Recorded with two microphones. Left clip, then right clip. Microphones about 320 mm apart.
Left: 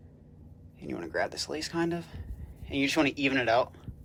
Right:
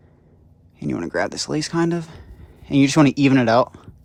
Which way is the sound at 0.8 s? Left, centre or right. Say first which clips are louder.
Right 9 dB; right.